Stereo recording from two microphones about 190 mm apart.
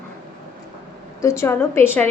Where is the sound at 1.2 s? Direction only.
15° left (ahead or behind).